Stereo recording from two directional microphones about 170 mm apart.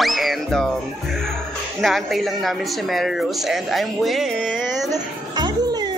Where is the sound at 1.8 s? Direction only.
Centre (ahead or behind).